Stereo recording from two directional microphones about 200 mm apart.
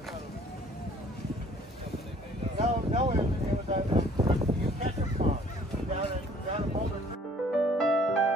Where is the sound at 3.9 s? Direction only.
20° right (ahead or behind).